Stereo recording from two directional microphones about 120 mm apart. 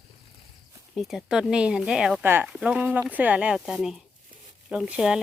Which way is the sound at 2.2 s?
20° right (ahead or behind).